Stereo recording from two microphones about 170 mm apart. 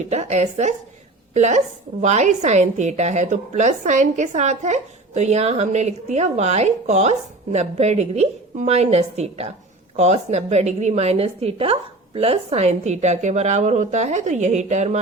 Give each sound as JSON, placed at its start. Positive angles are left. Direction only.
{"t": 0.1, "sound": "a woman's voice", "side_deg": -40}